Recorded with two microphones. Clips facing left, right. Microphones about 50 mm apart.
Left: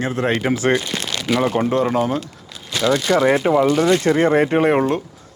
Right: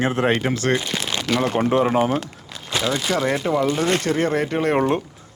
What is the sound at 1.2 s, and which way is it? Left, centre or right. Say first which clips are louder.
Speech: left 3 dB; centre.